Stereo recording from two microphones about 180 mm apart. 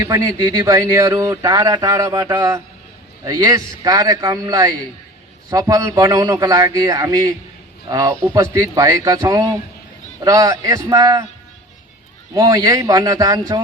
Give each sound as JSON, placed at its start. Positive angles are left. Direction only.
{"t": 0.0, "sound": "speech", "side_deg": -20}
{"t": 12.3, "sound": "speech", "side_deg": -20}